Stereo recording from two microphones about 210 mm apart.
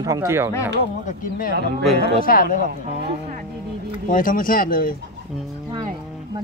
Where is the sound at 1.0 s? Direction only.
40° left (ahead or behind).